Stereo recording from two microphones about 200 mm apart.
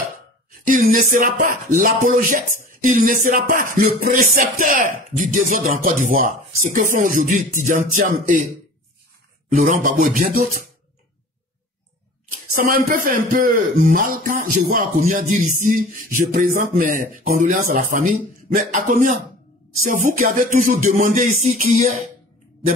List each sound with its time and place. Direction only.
0.7 s speech: 40° right (ahead or behind)
9.6 s speech: 40° right (ahead or behind)
12.6 s speech: 45° right (ahead or behind)